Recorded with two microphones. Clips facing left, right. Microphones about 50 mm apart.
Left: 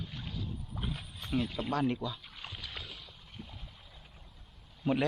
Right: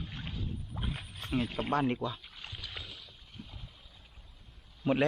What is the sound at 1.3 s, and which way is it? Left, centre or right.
Speech, right.